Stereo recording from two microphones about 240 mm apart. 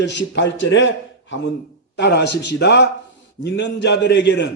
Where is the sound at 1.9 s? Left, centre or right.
Left.